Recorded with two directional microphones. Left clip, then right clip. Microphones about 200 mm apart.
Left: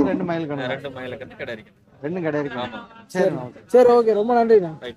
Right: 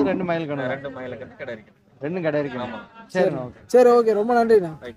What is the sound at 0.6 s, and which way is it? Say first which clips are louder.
Speech: even; 5° left (ahead or behind).